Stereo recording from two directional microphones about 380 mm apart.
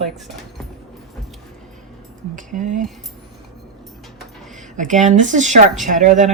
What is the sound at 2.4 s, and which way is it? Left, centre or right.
Speech, centre.